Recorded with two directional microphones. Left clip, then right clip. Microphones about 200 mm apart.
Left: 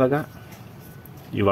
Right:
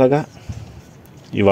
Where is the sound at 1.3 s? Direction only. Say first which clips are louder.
Right 6 dB; 20° right (ahead or behind).